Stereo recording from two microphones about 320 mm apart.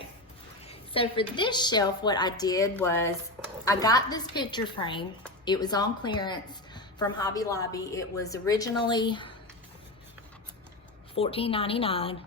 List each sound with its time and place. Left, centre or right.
0.7 s a woman's voice: centre
11.1 s a woman's voice: centre